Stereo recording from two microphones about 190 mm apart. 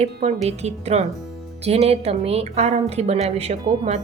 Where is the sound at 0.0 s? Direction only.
35° right (ahead or behind).